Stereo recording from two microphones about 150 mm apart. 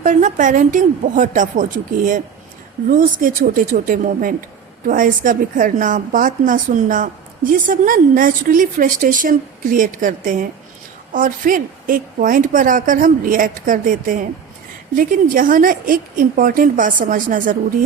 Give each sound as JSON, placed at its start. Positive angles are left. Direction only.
{"t": 0.0, "sound": "a woman's voice", "side_deg": -55}